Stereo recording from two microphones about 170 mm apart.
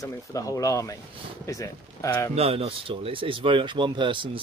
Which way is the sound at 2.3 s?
35° right (ahead or behind).